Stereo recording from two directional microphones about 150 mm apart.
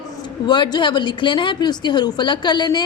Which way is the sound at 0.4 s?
30° left (ahead or behind).